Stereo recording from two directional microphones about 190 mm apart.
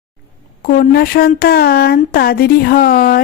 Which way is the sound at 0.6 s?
50° left (ahead or behind).